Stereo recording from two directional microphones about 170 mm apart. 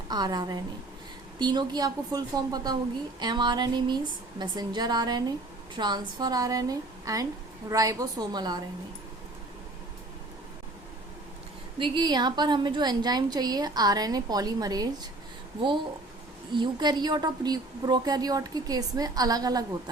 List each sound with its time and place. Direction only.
0.1 s a woman's voice: 25° right (ahead or behind)
11.8 s a woman's voice: 25° right (ahead or behind)
16.6 s a woman's voice: 25° right (ahead or behind)